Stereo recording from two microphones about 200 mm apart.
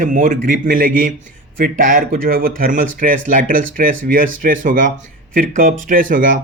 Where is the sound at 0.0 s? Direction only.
40° right (ahead or behind).